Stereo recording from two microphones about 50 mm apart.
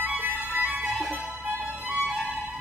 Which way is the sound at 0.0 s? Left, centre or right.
Right.